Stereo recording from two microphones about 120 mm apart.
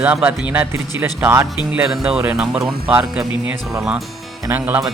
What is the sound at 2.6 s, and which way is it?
Speech, 45° right (ahead or behind).